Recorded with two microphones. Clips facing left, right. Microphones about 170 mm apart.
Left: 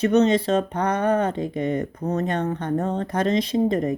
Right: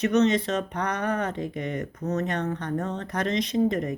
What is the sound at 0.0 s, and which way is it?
Speech, 30° left (ahead or behind).